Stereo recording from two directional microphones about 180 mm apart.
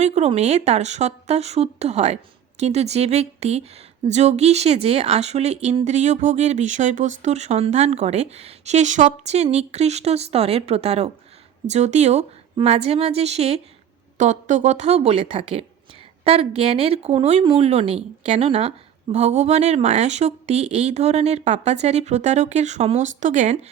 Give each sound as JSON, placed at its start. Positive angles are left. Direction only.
{"t": 0.0, "sound": "a woman's voice", "side_deg": -35}